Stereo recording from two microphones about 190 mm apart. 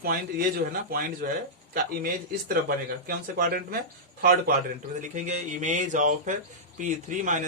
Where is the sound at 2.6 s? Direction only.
50° right (ahead or behind).